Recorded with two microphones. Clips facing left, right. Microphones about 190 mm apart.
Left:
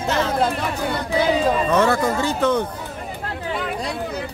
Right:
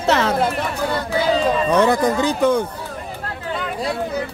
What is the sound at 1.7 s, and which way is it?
Speech, 15° right (ahead or behind).